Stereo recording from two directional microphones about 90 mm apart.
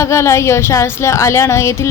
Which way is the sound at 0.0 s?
30° left (ahead or behind).